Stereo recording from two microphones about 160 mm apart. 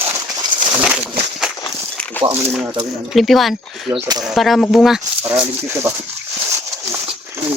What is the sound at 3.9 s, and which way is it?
Speech, 25° right (ahead or behind).